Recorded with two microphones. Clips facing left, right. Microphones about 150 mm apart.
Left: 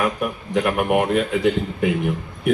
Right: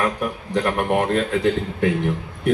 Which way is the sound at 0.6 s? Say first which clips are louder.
Left 1 dB; 5° left (ahead or behind).